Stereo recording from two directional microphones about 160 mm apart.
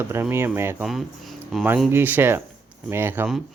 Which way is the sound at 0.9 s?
Centre (ahead or behind).